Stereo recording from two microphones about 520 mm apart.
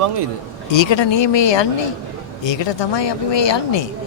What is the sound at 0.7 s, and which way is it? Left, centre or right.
A man's voice, left.